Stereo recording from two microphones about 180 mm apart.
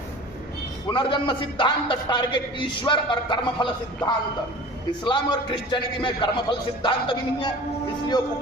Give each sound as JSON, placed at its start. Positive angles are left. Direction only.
{"t": 0.9, "sound": "a man's voice", "side_deg": 25}